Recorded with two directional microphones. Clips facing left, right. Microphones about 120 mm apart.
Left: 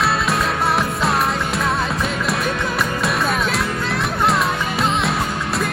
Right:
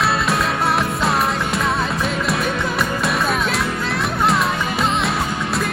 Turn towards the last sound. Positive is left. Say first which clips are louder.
# even
turn(degrees=0)  # may be behind; listen again after turning